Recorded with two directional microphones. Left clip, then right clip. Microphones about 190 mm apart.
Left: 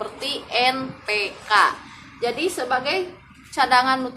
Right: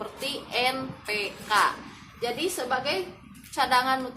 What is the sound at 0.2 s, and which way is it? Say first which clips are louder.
A woman's voice: left 6 dB; 30° left (ahead or behind).